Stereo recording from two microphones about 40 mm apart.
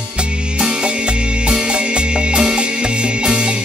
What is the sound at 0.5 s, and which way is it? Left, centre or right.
Music, right.